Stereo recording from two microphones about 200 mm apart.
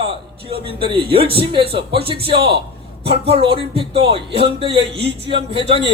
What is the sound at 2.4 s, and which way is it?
Speech, 55° right (ahead or behind).